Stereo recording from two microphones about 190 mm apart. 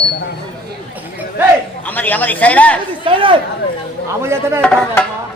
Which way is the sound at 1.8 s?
10° left (ahead or behind).